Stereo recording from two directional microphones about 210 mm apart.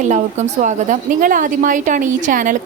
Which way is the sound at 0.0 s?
35° right (ahead or behind).